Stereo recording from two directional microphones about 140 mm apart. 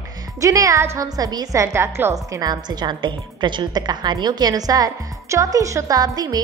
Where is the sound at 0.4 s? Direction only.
25° right (ahead or behind).